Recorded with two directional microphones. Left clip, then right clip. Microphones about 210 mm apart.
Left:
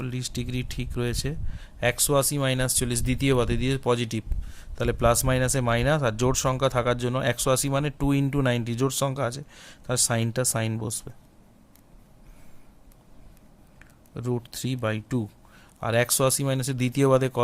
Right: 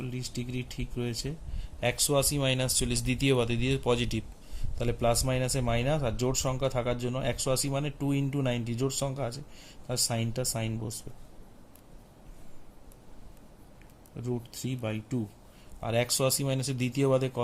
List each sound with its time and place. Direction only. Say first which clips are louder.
0.0 s a man's voice: left 5 dB; 50° left (ahead or behind)
14.2 s a man's voice: left 5 dB; 50° left (ahead or behind)